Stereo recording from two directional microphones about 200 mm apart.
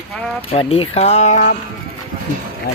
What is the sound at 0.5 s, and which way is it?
Speech, 30° left (ahead or behind).